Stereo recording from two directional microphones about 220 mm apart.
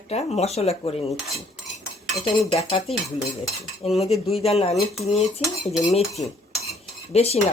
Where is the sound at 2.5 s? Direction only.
25° left (ahead or behind).